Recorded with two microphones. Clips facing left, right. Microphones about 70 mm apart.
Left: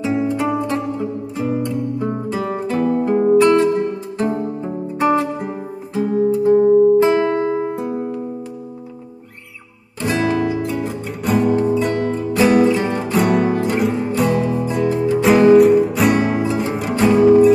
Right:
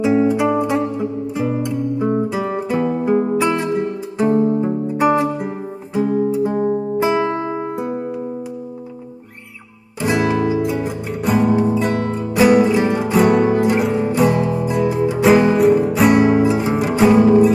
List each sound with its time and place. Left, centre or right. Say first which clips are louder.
0.0 s music: right 4 dB; centre
7.7 s music: even; centre
9.9 s music: right 1 dB; centre